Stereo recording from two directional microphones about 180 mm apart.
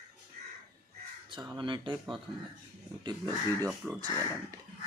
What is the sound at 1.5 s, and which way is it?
Speech, 25° right (ahead or behind).